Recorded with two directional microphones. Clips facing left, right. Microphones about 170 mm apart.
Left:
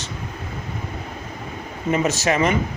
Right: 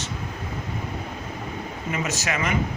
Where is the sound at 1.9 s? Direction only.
30° left (ahead or behind).